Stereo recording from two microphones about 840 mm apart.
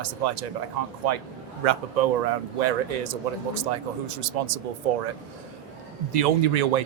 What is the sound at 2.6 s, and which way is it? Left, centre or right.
Speech, right.